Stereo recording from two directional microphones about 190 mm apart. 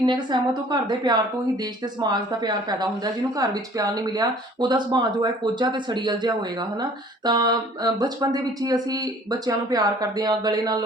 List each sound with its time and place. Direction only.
0.0 s speech: 25° right (ahead or behind)